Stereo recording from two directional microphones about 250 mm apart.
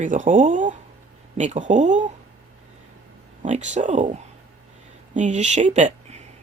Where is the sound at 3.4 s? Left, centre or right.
Right.